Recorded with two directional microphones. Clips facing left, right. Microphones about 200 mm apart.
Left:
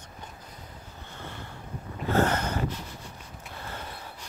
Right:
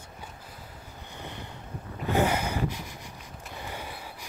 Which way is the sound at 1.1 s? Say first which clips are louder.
Right 1 dB; 15° right (ahead or behind).